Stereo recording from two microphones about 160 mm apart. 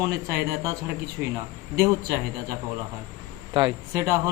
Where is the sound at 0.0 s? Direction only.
20° right (ahead or behind).